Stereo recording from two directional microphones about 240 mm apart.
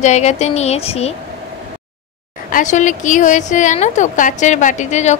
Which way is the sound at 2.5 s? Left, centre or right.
Left.